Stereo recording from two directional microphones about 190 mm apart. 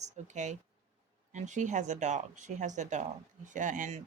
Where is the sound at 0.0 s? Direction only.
40° right (ahead or behind).